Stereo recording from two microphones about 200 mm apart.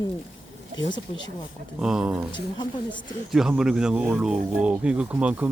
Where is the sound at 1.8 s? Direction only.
5° right (ahead or behind).